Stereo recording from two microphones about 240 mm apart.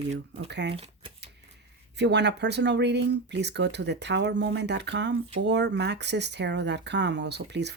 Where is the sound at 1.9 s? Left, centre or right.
Right.